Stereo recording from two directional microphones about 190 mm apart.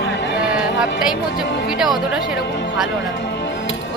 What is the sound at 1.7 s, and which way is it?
Speech, centre (ahead or behind).